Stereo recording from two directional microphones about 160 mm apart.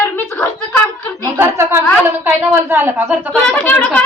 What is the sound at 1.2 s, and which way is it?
A woman's voice, 15° right (ahead or behind).